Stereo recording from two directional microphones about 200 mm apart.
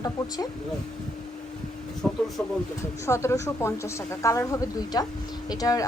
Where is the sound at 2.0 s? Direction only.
5° left (ahead or behind).